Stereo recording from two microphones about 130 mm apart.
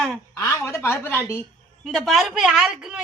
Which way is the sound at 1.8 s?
Centre (ahead or behind).